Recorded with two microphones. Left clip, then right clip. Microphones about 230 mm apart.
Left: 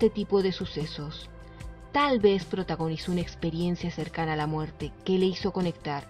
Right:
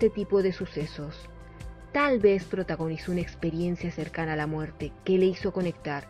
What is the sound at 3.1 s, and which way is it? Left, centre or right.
Speech, centre.